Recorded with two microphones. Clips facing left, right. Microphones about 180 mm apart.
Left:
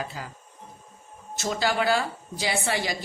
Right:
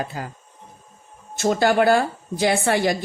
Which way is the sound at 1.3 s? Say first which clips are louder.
Right 8 dB; 55° right (ahead or behind).